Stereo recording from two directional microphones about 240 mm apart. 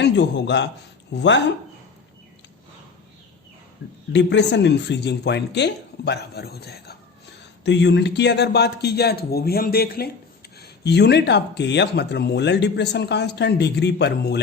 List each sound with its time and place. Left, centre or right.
0.0 s speech: left
4.1 s speech: left